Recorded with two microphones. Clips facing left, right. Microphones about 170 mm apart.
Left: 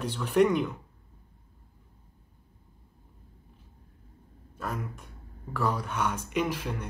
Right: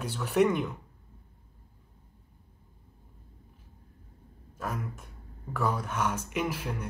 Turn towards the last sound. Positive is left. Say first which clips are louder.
# left 2 dB
turn(degrees=-5)  # may be behind; listen again after turning